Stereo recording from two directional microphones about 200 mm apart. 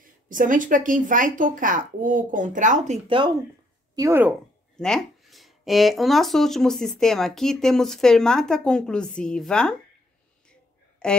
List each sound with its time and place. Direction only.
0.3 s speech: 40° right (ahead or behind)
3.9 s speech: 15° right (ahead or behind)
4.7 s speech: 5° left (ahead or behind)
11.0 s speech: 5° left (ahead or behind)